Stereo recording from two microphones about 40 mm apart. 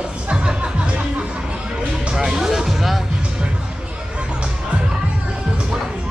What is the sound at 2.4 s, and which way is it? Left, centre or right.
Music, centre.